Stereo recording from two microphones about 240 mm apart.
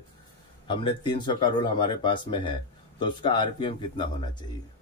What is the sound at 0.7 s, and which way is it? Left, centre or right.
Speech, centre.